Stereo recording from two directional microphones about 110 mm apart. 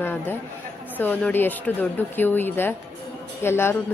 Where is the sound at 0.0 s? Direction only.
20° left (ahead or behind).